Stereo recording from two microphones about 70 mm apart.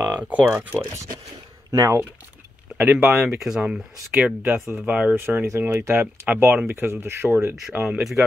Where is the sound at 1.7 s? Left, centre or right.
Right.